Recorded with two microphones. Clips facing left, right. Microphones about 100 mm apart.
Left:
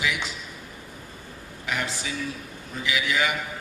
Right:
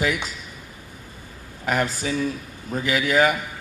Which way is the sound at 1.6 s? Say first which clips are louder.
Right 7 dB; 45° right (ahead or behind).